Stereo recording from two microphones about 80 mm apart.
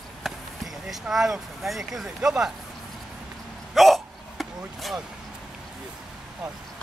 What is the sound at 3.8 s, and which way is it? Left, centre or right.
Hiccup, centre.